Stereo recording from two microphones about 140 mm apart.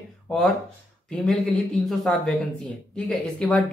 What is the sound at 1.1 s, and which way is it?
Speech, centre (ahead or behind).